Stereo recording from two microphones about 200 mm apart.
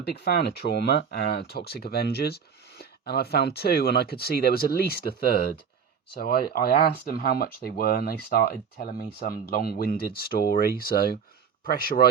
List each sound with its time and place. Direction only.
0.2 s speech: 55° left (ahead or behind)